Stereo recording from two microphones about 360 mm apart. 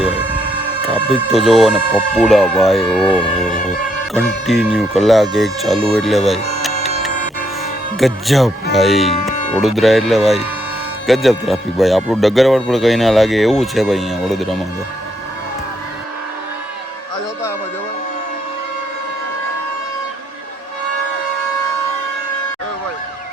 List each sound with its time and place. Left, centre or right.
1.3 s speech: centre
6.0 s a sound: centre
7.9 s speech: centre